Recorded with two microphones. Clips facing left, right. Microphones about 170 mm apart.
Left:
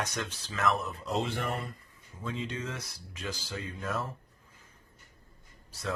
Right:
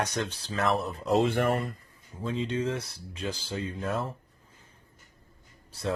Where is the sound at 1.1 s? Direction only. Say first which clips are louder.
Right 8 dB; 55° right (ahead or behind).